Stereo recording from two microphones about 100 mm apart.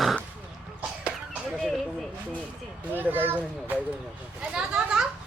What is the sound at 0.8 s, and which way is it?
Cough, 10° right (ahead or behind).